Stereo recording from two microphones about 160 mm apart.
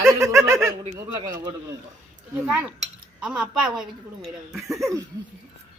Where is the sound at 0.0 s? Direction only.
20° right (ahead or behind).